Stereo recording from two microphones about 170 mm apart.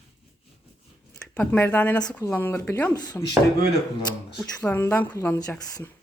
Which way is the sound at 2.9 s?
20° left (ahead or behind).